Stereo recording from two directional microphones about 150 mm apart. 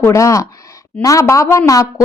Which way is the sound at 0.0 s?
20° left (ahead or behind).